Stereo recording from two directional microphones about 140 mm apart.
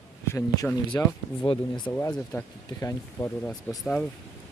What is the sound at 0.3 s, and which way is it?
Speech, 20° left (ahead or behind).